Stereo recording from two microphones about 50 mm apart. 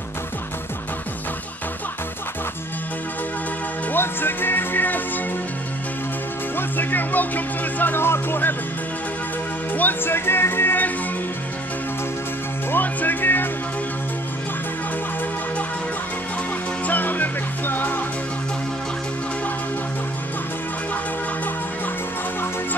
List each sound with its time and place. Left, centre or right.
3.9 s speech: left
6.5 s music: left
9.7 s speech: left
10.1 s music: left
12.7 s music: left
16.8 s music: left